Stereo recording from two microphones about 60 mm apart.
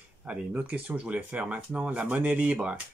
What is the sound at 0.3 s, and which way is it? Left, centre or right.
Speech, right.